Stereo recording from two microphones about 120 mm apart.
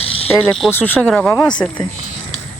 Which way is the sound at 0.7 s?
15° left (ahead or behind).